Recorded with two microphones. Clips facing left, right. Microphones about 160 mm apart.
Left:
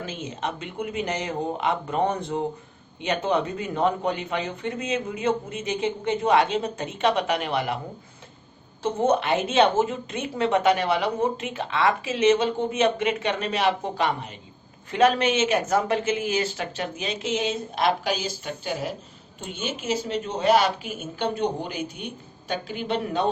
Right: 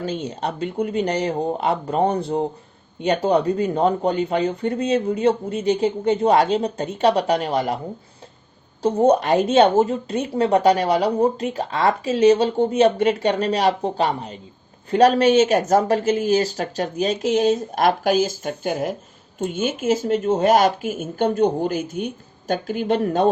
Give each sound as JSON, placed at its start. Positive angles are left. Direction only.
{"t": 0.0, "sound": "a woman's voice", "side_deg": -35}
{"t": 8.8, "sound": "a woman's voice", "side_deg": -35}